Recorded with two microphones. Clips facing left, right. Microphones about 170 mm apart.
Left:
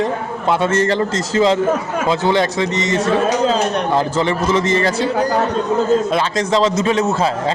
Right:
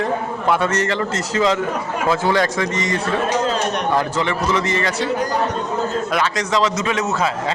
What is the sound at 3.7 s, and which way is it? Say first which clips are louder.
Speech: left 3 dB; 25° left (ahead or behind).